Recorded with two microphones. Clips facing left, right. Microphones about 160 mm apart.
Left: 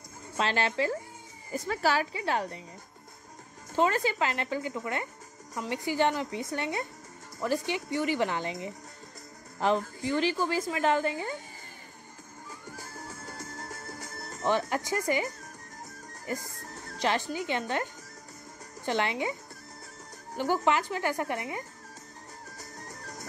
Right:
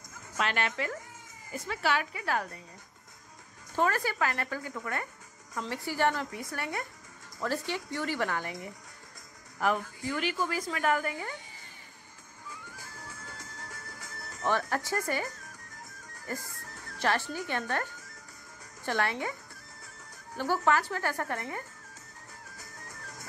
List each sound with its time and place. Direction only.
0.4 s a woman's voice: 30° left (ahead or behind)
3.7 s a woman's voice: 20° left (ahead or behind)
12.7 s music: 40° left (ahead or behind)
14.4 s speech: 20° left (ahead or behind)
16.3 s music: 20° left (ahead or behind)
17.0 s a woman's voice: 20° left (ahead or behind)
20.3 s speech: 20° left (ahead or behind)
22.6 s music: 40° left (ahead or behind)